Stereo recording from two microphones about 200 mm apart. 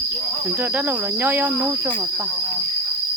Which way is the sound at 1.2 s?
10° right (ahead or behind).